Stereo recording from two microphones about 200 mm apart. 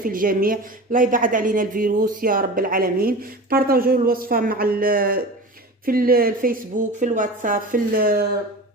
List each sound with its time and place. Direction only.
0.0 s speech: 45° right (ahead or behind)